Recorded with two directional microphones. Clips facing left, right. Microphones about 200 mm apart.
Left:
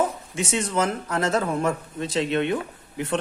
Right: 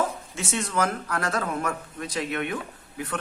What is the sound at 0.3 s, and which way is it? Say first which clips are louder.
Speech: left 3 dB; 20° left (ahead or behind).